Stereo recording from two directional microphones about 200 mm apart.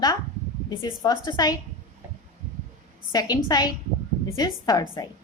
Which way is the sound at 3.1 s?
20° left (ahead or behind).